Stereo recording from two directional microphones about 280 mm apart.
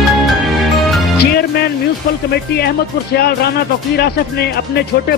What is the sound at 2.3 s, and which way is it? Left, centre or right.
Speech, left.